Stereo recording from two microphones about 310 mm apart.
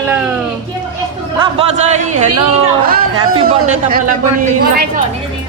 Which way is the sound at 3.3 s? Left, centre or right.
Right.